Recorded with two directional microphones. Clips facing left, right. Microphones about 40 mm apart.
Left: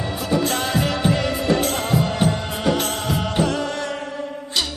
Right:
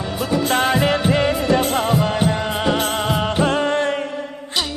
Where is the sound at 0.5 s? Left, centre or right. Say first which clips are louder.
Right 5 dB; right.